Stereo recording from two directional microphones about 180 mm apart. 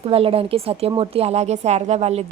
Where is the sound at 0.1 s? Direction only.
30° right (ahead or behind).